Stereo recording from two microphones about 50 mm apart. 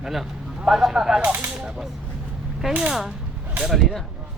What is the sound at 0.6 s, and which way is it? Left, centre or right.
Speech, centre.